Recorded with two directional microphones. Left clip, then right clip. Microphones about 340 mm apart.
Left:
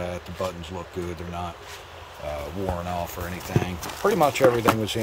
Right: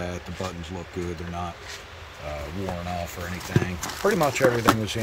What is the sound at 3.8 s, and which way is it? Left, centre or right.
Speech, centre.